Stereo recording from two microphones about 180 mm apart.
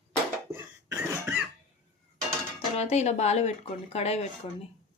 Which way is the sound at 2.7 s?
35° left (ahead or behind).